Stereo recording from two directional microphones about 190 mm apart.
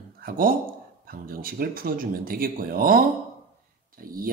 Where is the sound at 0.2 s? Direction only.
50° right (ahead or behind).